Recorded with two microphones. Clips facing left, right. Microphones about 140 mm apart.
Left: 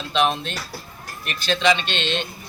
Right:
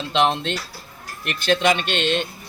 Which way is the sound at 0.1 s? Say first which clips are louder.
Right 1 dB; 20° right (ahead or behind).